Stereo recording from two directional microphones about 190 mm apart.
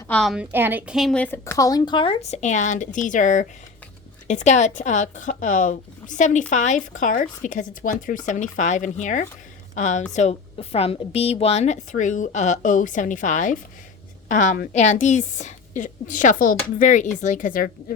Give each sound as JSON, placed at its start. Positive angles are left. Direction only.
{"t": 0.1, "sound": "a woman's voice", "side_deg": 0}
{"t": 0.5, "sound": "a woman's voice", "side_deg": -10}